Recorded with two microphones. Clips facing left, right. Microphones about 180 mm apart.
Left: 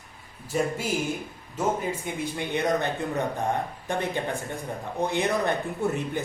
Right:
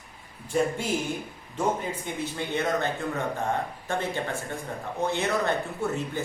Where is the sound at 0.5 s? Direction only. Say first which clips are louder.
Right 1 dB; 5° left (ahead or behind).